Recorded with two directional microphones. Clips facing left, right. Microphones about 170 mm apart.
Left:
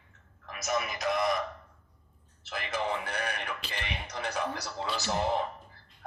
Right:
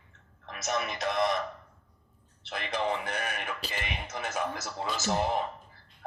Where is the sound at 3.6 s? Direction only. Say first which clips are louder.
Right 3 dB; 40° right (ahead or behind).